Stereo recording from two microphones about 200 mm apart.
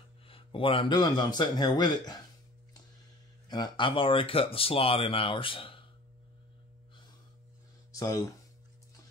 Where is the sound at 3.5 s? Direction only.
20° left (ahead or behind).